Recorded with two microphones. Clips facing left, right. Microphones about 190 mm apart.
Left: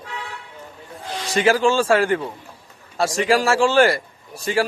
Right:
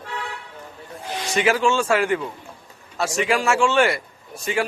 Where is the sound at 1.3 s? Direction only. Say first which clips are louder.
Left 3 dB; 30° left (ahead or behind).